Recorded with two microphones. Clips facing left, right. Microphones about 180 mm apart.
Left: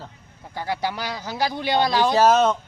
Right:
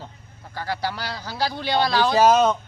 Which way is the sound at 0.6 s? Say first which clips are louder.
Left 1 dB; 20° left (ahead or behind).